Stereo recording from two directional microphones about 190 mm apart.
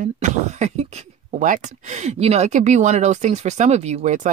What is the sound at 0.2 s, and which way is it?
Speech, 35° right (ahead or behind).